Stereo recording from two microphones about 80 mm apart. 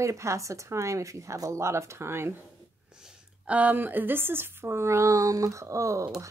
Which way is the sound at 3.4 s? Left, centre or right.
Centre.